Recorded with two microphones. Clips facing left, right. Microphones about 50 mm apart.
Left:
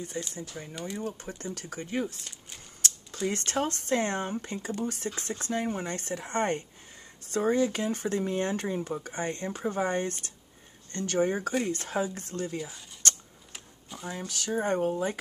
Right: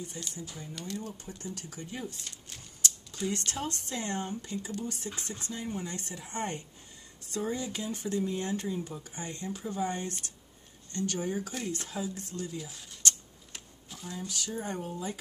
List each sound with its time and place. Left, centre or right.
0.3 s speech: left
13.5 s a sound: centre
14.0 s speech: left